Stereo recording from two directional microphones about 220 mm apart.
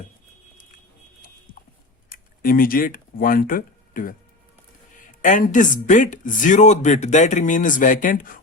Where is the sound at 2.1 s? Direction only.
40° left (ahead or behind).